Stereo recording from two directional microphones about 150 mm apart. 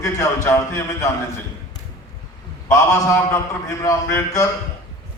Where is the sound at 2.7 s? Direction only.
20° left (ahead or behind).